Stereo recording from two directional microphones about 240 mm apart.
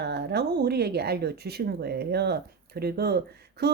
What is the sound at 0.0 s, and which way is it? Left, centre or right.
Speech, right.